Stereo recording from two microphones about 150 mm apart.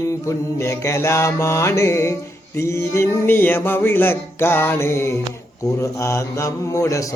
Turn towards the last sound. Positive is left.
turn(degrees=20)  # may be behind; listen again after turning